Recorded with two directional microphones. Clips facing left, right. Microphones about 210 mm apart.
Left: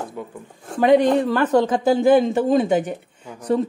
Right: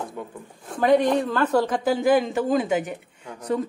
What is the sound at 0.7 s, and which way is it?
Speech, 25° left (ahead or behind).